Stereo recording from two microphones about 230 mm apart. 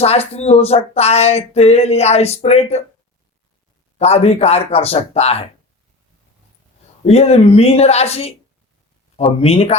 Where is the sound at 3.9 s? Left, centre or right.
Left.